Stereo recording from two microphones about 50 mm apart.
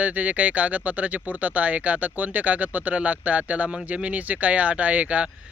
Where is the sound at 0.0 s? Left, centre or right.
Right.